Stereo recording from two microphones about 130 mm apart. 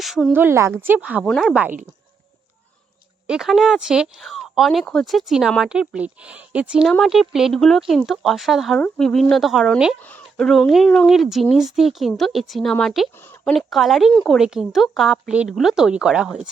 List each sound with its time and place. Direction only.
0.0 s a woman's voice: centre (ahead or behind)
0.3 s speech: 20° right (ahead or behind)
1.2 s speech: centre (ahead or behind)
3.2 s speech: 5° right (ahead or behind)